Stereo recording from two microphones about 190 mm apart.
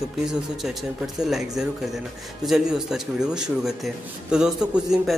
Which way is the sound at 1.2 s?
5° right (ahead or behind).